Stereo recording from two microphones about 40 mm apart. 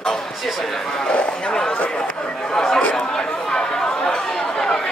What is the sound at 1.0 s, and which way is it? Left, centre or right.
Speech, left.